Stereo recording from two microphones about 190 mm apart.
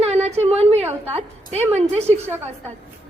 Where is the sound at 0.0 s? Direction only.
35° right (ahead or behind).